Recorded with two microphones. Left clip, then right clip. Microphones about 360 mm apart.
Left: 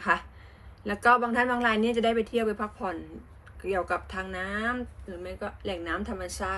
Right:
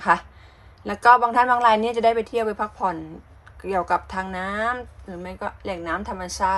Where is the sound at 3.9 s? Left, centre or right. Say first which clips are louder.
Right 7 dB; centre.